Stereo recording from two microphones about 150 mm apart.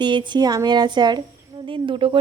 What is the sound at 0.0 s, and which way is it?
A woman's voice, 30° right (ahead or behind).